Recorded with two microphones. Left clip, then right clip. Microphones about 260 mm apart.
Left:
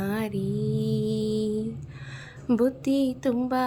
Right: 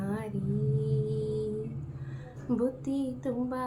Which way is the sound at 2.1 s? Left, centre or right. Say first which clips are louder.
Left 7 dB; left.